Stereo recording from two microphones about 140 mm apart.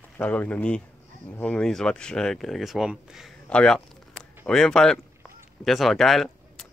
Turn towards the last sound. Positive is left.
turn(degrees=0)  # may be behind; listen again after turning